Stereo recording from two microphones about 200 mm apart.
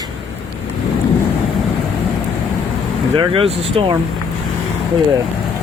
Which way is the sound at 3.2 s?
25° right (ahead or behind).